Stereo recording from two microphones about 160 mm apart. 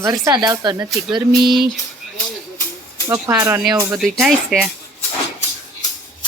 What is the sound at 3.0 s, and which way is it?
Speech, 20° right (ahead or behind).